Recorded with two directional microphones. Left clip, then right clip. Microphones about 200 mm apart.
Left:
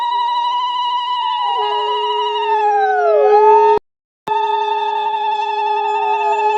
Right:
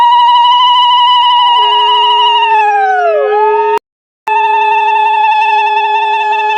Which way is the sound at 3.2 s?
25° left (ahead or behind).